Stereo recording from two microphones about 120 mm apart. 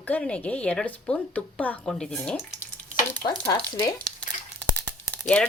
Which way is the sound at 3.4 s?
20° left (ahead or behind).